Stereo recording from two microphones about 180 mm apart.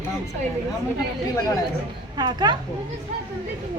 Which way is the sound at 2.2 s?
20° right (ahead or behind).